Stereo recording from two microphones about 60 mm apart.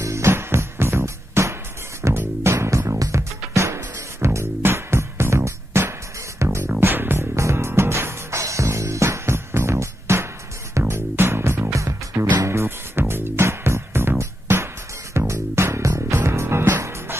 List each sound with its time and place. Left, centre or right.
0.0 s music: right
6.8 s music: right
7.3 s music: right
11.7 s music: right
12.4 s music: right